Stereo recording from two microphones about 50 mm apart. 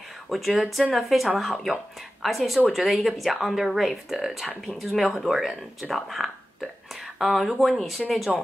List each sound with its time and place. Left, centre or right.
0.3 s speech: centre